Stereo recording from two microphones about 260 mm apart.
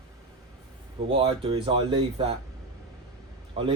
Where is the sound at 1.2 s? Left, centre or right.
Right.